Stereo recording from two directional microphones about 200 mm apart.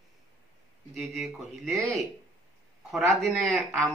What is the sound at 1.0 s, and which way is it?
Speech, centre (ahead or behind).